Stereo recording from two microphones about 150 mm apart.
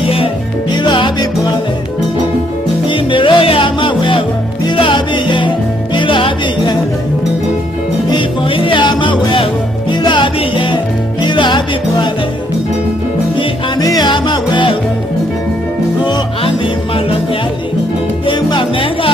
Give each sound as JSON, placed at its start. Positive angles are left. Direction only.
{"t": 0.7, "sound": "salsa music", "side_deg": 30}
{"t": 2.9, "sound": "music", "side_deg": 35}
{"t": 8.1, "sound": "music", "side_deg": 35}
{"t": 13.4, "sound": "music", "side_deg": 25}
{"t": 18.2, "sound": "music", "side_deg": 35}